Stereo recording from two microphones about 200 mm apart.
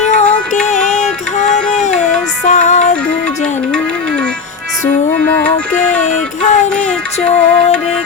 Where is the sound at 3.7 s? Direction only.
5° left (ahead or behind).